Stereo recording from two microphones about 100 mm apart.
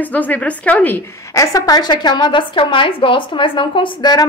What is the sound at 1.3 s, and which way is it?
A woman's voice, 35° left (ahead or behind).